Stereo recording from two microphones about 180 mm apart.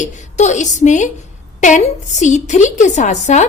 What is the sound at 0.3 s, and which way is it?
A woman's voice, 40° left (ahead or behind).